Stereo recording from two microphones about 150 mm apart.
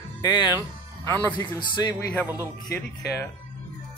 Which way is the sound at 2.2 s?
15° right (ahead or behind).